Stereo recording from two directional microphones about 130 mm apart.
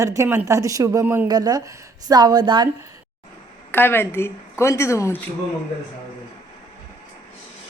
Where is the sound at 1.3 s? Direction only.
30° right (ahead or behind).